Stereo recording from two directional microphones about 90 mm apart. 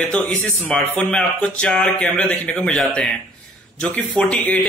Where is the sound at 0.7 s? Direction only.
10° left (ahead or behind).